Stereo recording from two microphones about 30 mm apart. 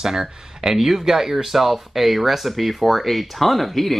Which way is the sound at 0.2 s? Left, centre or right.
Centre.